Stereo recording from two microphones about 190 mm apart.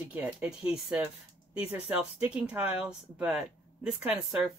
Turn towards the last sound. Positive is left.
turn(degrees=-5)  # may be behind; listen again after turning